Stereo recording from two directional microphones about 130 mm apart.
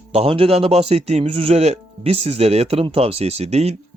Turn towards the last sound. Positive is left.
turn(degrees=-55)  # may be behind; listen again after turning